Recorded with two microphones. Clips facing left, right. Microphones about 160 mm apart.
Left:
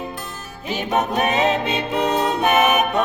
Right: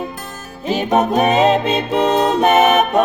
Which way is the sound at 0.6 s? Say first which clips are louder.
Right 6 dB; 35° right (ahead or behind).